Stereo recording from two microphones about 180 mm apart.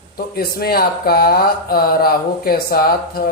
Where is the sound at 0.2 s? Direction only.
55° left (ahead or behind).